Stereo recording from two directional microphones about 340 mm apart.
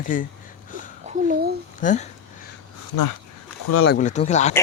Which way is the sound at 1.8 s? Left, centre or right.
Left.